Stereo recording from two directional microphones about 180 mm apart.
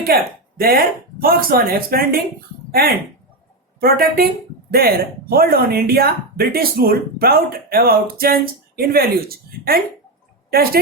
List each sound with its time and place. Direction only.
0.0 s speech: 55° right (ahead or behind)
3.8 s speech: 55° right (ahead or behind)